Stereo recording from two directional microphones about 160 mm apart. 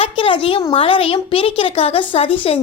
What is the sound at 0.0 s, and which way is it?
A woman's voice, 35° left (ahead or behind).